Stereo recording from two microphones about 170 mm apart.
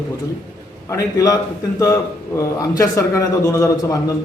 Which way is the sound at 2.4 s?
15° left (ahead or behind).